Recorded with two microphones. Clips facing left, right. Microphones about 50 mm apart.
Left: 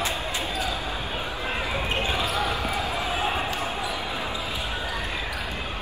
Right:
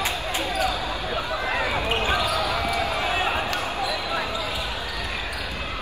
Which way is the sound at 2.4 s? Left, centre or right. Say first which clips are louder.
Right 2 dB; right.